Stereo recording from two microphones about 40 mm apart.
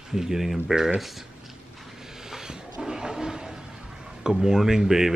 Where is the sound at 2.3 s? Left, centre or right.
Centre.